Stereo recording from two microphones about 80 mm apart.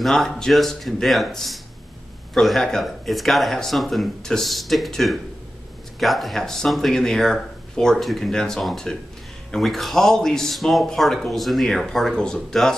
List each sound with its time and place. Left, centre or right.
0.0 s speech: centre